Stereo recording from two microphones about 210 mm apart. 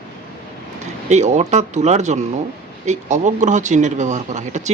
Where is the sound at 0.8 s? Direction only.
35° right (ahead or behind).